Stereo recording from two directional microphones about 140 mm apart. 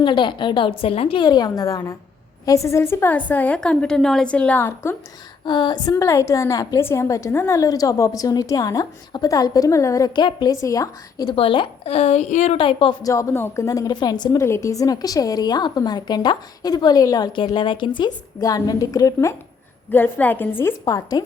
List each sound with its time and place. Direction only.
0.0 s a woman's voice: 35° left (ahead or behind); by 4.9 s 15° left (ahead or behind)
5.5 s a woman's voice: 30° left (ahead or behind); by 12.5 s 55° left (ahead or behind)
12.5 s a woman's voice: 35° left (ahead or behind)
13.1 s a woman's voice: 20° left (ahead or behind)
19.9 s a woman's voice: 10° left (ahead or behind)
20.8 s a woman's voice: 25° left (ahead or behind)